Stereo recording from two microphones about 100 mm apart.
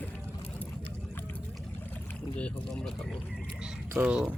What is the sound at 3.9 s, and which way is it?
Speech, 15° right (ahead or behind).